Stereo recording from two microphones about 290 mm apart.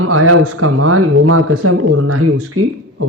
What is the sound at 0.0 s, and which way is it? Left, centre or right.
Speech, right.